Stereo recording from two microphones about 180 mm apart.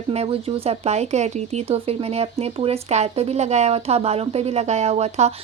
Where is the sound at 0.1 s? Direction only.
35° right (ahead or behind).